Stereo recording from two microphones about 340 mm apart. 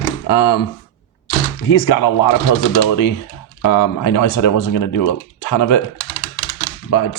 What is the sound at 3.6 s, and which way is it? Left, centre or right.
Speech, left.